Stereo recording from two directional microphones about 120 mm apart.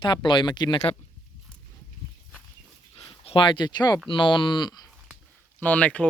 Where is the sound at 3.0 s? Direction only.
50° left (ahead or behind).